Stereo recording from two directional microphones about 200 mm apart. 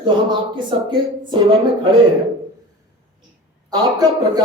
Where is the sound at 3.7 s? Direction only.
20° right (ahead or behind).